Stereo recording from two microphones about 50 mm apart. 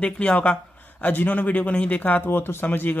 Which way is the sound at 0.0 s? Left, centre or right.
Left.